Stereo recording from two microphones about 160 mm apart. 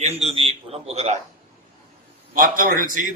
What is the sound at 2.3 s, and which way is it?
Speech, 60° right (ahead or behind).